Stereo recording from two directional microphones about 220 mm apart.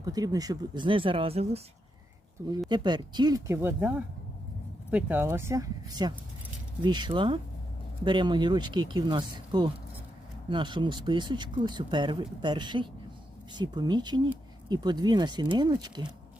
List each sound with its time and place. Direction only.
0.0 s speech: 15° right (ahead or behind)
2.6 s speech: 20° right (ahead or behind)